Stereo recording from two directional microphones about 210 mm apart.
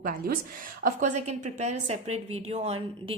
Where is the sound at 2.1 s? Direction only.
90° right.